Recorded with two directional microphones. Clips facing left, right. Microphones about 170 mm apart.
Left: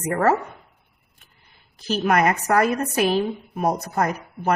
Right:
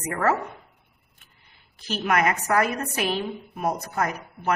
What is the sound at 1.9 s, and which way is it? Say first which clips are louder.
A woman's voice: left 4 dB; 35° left (ahead or behind).